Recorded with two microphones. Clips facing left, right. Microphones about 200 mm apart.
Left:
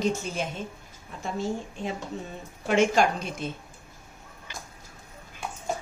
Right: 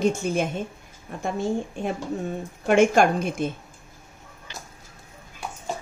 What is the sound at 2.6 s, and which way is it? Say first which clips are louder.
Speech: right 4 dB; 50° right (ahead or behind).